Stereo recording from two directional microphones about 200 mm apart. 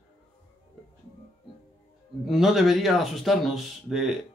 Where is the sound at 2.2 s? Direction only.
Centre (ahead or behind).